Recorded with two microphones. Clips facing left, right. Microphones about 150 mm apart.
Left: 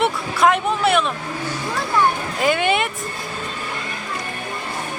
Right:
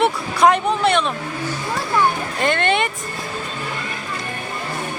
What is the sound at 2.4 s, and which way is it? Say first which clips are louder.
Vehicle: even; 5° left (ahead or behind).